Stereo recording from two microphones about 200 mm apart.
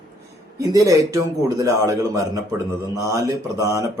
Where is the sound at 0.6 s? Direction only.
15° right (ahead or behind).